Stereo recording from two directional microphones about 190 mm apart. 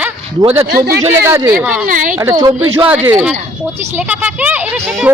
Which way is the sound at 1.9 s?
45° right (ahead or behind).